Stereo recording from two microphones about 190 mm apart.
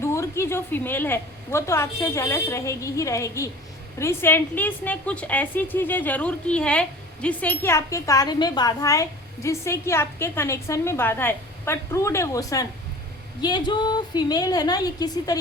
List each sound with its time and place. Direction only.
0.0 s a woman's voice: 15° left (ahead or behind)